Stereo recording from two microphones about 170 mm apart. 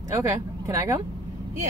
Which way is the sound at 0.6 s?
15° right (ahead or behind).